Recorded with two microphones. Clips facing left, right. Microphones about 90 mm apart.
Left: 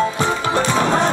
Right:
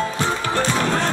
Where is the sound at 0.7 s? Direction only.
20° left (ahead or behind).